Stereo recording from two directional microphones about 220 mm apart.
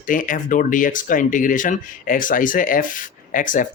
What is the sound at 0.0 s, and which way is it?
Speech, 35° left (ahead or behind).